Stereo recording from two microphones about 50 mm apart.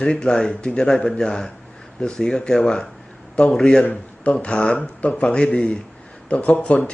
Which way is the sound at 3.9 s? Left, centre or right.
Left.